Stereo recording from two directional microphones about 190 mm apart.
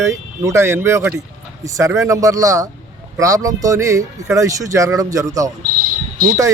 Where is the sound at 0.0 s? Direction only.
15° right (ahead or behind).